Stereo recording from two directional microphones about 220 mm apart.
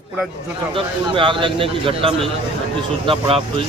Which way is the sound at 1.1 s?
20° right (ahead or behind).